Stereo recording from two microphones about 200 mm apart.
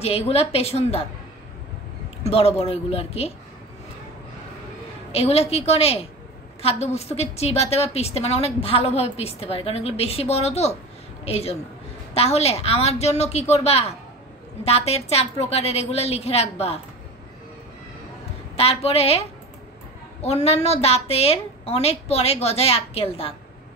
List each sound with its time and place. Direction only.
0.0 s a woman's voice: 30° left (ahead or behind)
2.2 s a woman's voice: 30° left (ahead or behind)
5.1 s a woman's voice: 30° left (ahead or behind)
18.6 s a woman's voice: 30° left (ahead or behind)